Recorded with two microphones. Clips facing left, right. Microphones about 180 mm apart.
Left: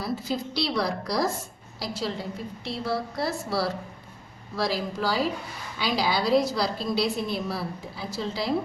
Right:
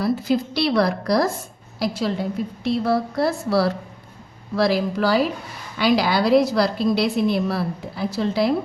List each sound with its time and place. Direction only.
0.0 s a woman's voice: 65° right (ahead or behind)